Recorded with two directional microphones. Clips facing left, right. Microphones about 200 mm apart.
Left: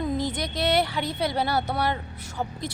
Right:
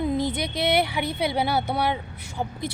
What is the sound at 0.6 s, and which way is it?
A woman's voice, 10° right (ahead or behind).